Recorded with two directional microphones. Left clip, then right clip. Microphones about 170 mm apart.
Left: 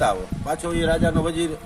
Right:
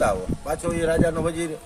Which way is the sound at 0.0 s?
Centre (ahead or behind).